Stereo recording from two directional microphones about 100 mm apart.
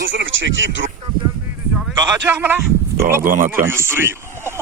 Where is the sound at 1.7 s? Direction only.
5° right (ahead or behind).